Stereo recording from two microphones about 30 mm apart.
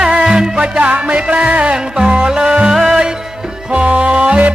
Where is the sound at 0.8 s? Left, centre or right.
Right.